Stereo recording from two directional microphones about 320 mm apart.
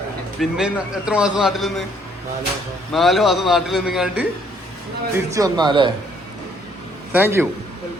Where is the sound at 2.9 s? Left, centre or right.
Centre.